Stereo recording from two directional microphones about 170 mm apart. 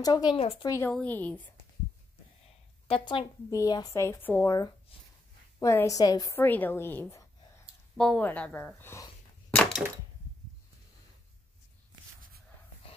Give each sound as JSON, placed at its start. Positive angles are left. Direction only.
{"t": 0.0, "sound": "speech", "side_deg": 25}
{"t": 0.4, "sound": "a woman's voice", "side_deg": 35}
{"t": 0.7, "sound": "a woman's voice", "side_deg": 15}
{"t": 2.9, "sound": "a woman's voice", "side_deg": 30}
{"t": 9.6, "sound": "a sound", "side_deg": 0}